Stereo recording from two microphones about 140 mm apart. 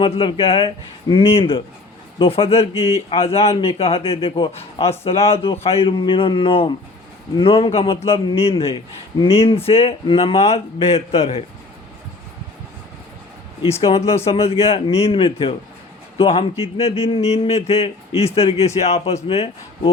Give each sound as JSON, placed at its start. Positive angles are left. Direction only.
{"t": 0.0, "sound": "speech", "side_deg": 40}
{"t": 13.6, "sound": "speech", "side_deg": 45}